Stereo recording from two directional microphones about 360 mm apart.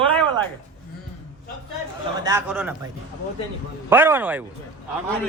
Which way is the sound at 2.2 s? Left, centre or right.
Centre.